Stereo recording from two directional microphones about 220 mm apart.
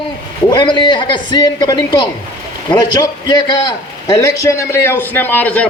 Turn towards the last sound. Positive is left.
turn(degrees=5)  # may be behind; listen again after turning